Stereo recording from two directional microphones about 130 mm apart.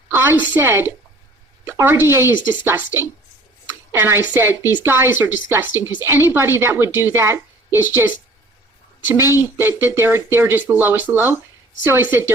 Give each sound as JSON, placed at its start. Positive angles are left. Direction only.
{"t": 0.1, "sound": "a sound", "side_deg": -15}
{"t": 0.5, "sound": "speech", "side_deg": -15}
{"t": 9.0, "sound": "speech", "side_deg": -20}